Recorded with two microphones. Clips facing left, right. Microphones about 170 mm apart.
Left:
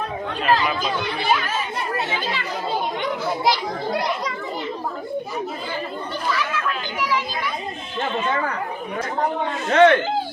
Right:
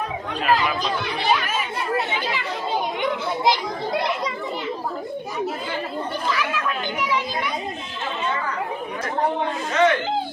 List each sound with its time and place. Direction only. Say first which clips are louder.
0.6 s speech: left 1 dB; centre (ahead or behind)
3.4 s speech: right 1 dB; 20° right (ahead or behind)
9.6 s speech: left 5 dB; 55° left (ahead or behind)